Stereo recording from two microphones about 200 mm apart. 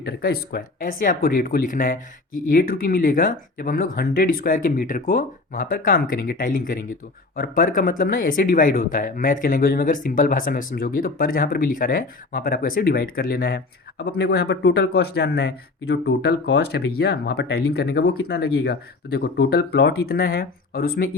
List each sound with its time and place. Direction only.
0.0 s speech: 50° left (ahead or behind)